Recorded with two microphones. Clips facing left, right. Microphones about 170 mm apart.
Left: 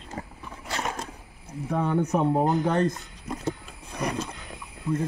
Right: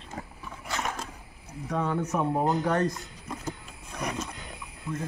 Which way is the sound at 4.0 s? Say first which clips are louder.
Left 4 dB; 35° left (ahead or behind).